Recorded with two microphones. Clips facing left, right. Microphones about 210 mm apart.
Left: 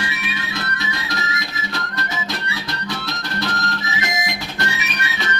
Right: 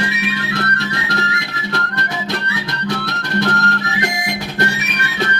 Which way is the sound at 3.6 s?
65° right (ahead or behind).